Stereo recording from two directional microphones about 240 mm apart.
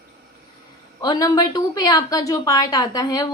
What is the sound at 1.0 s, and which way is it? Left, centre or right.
A woman's voice, centre.